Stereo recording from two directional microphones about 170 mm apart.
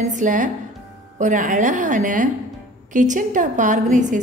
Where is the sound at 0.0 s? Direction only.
50° right (ahead or behind).